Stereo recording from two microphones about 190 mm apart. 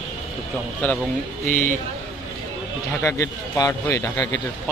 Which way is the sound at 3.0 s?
15° left (ahead or behind).